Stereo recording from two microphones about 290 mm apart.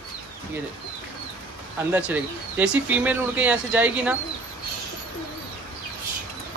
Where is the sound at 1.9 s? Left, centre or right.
Centre.